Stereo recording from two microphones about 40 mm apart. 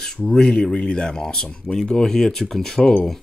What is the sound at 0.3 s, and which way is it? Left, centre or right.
Speech, centre.